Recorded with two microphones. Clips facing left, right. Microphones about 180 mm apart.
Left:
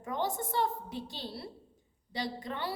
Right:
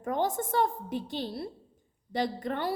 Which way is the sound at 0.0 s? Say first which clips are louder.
Right 5 dB; 50° right (ahead or behind).